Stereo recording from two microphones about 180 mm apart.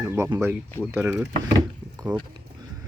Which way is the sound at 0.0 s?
15° right (ahead or behind).